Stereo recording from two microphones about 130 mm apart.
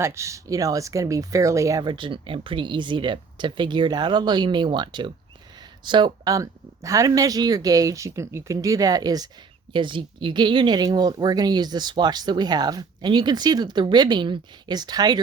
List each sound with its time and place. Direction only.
0.0 s speech: 20° right (ahead or behind)
1.8 s speech: 35° right (ahead or behind)
6.3 s speech: 25° right (ahead or behind)